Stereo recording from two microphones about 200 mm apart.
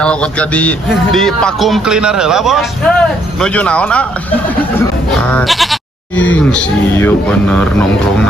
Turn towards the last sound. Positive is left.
turn(degrees=10)  # may be behind; listen again after turning